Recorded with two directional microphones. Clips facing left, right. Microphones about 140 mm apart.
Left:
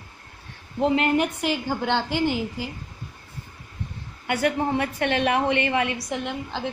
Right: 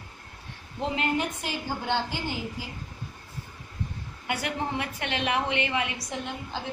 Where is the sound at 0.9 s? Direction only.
65° left (ahead or behind).